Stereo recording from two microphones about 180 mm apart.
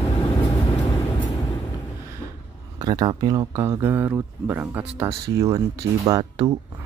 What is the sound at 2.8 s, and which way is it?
Speech, 20° right (ahead or behind).